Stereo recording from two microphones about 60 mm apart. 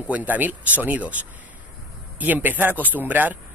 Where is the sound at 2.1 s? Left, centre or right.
Right.